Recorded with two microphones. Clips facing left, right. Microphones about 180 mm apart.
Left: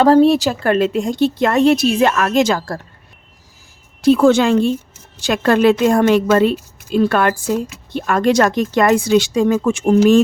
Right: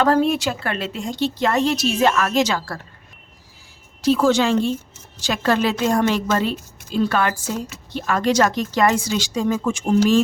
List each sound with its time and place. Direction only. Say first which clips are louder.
0.0 s speech: left 7 dB; 35° left (ahead or behind)
4.0 s speech: left 5 dB; 55° left (ahead or behind)